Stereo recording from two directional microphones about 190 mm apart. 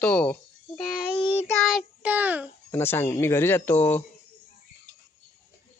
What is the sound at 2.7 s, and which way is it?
Speech, 10° left (ahead or behind).